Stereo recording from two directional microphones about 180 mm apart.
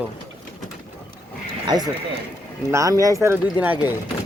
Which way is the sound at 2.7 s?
15° right (ahead or behind).